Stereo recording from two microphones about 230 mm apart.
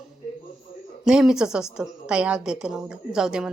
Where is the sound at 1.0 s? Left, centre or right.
Centre.